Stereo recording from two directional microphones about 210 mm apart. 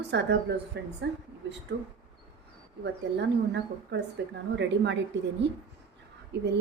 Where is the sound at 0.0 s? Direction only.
55° right (ahead or behind).